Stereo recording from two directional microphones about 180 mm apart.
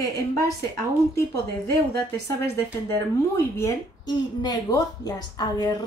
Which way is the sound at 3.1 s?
15° left (ahead or behind).